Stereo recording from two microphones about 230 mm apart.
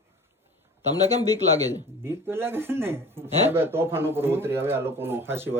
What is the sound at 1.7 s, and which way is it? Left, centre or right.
Speech, centre.